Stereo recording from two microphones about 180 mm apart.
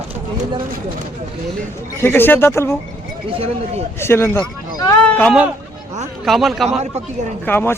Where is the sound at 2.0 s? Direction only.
10° left (ahead or behind).